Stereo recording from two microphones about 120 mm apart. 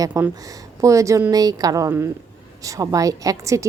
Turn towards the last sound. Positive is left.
turn(degrees=-25)  # may be behind; listen again after turning